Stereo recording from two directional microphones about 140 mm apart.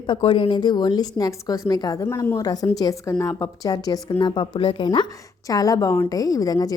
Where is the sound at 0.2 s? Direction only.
40° left (ahead or behind).